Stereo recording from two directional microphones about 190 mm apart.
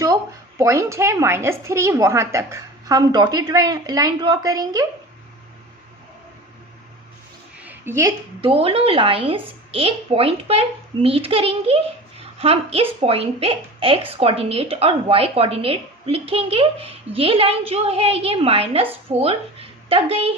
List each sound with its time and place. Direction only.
0.6 s a woman's voice: 15° right (ahead or behind)
7.6 s a sound: 10° right (ahead or behind)
8.4 s a woman's voice: 30° right (ahead or behind)